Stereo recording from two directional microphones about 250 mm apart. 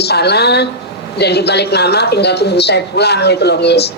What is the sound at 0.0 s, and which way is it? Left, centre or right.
A woman's voice, left.